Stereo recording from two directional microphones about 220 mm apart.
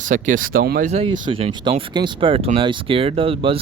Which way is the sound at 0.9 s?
25° right (ahead or behind).